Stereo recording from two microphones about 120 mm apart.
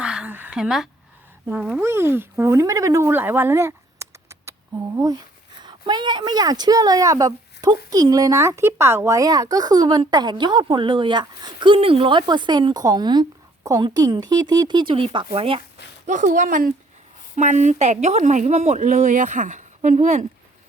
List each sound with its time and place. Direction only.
0.0 s a sound: 10° right (ahead or behind)
1.8 s speech: 20° right (ahead or behind); by 15.6 s 50° right (ahead or behind)
16.0 s a woman's voice: 90° right